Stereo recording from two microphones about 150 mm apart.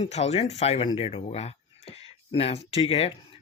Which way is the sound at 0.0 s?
45° left (ahead or behind).